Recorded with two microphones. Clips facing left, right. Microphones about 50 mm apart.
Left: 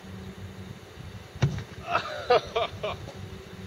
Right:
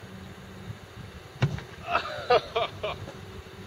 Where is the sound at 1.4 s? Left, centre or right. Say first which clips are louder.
Even; centre.